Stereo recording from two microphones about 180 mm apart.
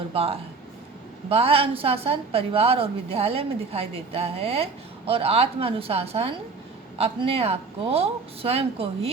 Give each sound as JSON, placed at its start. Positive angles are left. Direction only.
{"t": 0.1, "sound": "a woman's voice", "side_deg": -30}